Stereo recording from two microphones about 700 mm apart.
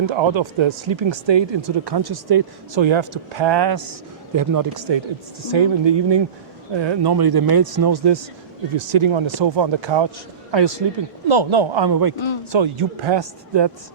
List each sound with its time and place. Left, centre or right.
0.0 s speech: right
8.8 s speech: right